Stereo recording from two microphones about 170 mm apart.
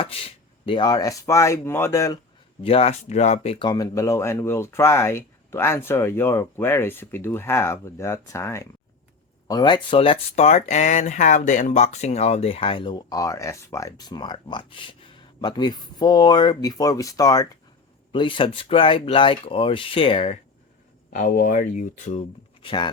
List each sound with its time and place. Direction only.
0.0 s speech: 35° left (ahead or behind); by 2.1 s 20° left (ahead or behind)
2.6 s speech: 35° left (ahead or behind)
21.1 s speech: 55° left (ahead or behind)
22.6 s speech: 30° left (ahead or behind)